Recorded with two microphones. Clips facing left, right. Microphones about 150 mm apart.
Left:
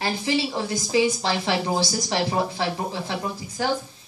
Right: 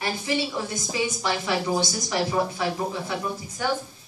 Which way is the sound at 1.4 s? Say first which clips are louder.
Even; 30° left (ahead or behind).